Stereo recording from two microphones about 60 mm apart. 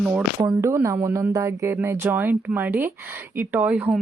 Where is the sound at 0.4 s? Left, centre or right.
Right.